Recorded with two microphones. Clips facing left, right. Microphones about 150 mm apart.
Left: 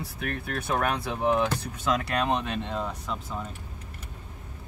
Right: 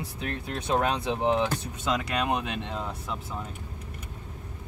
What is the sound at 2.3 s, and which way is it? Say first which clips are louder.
Speech: left 1 dB; 10° right (ahead or behind).